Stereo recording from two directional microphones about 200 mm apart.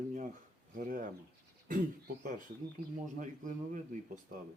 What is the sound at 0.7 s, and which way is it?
Speech, 40° right (ahead or behind).